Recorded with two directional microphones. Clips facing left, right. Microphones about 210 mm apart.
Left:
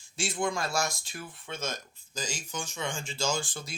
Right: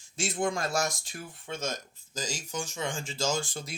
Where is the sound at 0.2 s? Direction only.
45° right (ahead or behind).